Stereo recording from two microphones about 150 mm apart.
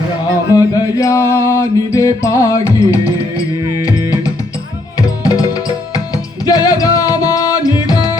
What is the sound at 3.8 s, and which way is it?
Music, 25° left (ahead or behind).